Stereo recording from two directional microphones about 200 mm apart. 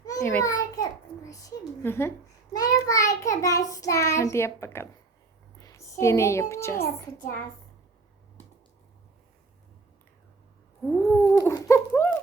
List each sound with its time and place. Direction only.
0.0 s a sound: 15° left (ahead or behind)
2.6 s a child's voice: 15° left (ahead or behind)
5.5 s a sound: 15° left (ahead or behind)
6.5 s a child's voice: 15° left (ahead or behind)
6.8 s a child's voice: 40° left (ahead or behind)
10.8 s cat: centre (ahead or behind)
11.3 s dog: 15° left (ahead or behind)